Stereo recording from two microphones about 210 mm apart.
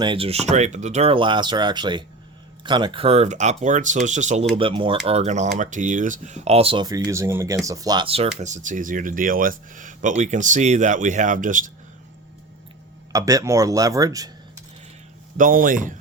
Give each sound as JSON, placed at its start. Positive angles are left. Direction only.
{"t": 0.0, "sound": "speech", "side_deg": -25}
{"t": 13.1, "sound": "speech", "side_deg": -15}
{"t": 15.4, "sound": "speech", "side_deg": -40}